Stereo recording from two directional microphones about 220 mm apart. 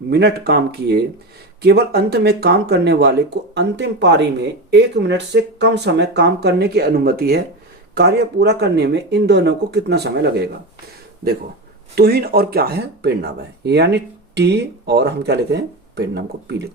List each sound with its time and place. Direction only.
0.1 s speech: 50° right (ahead or behind)
11.9 s speech: 45° right (ahead or behind)